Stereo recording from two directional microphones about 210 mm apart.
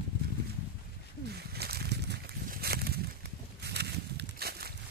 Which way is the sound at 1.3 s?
50° right (ahead or behind).